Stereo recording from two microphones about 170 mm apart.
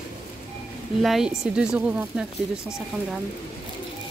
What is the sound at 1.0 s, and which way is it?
Speech, 5° right (ahead or behind).